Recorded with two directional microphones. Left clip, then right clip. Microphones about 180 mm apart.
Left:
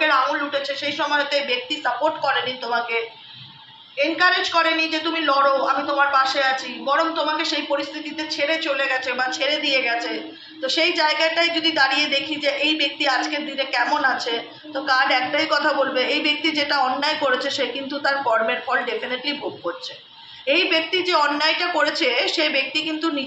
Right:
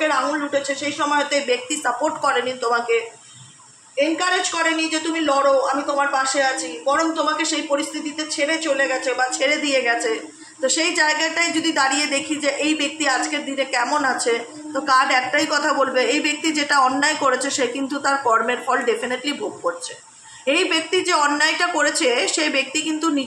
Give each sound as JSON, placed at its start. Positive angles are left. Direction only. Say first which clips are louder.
{"t": 0.0, "sound": "a woman's voice", "louder": "left 1 dB", "side_deg": -55}
{"t": 4.2, "sound": "a woman's voice", "louder": "left 2 dB", "side_deg": -55}
{"t": 20.4, "sound": "a woman's voice", "louder": "even", "side_deg": -60}